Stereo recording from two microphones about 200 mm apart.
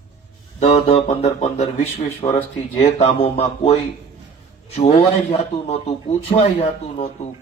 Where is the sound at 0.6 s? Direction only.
30° left (ahead or behind).